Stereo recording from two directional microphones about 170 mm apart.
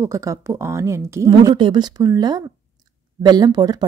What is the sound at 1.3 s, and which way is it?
A woman's voice, 30° right (ahead or behind).